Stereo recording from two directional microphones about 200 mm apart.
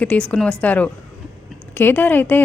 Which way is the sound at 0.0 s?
5° left (ahead or behind).